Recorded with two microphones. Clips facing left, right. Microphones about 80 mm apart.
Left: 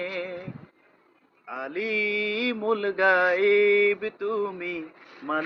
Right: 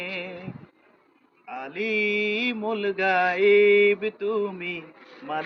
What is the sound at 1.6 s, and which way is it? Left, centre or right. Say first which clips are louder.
Mantra: right 2 dB; left.